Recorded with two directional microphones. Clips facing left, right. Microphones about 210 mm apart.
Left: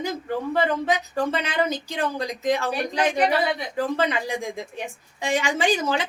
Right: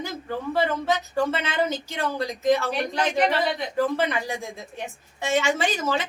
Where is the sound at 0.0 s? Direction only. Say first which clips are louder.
Left 3 dB; 15° left (ahead or behind).